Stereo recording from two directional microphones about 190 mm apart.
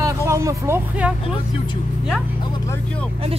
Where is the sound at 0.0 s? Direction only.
15° right (ahead or behind).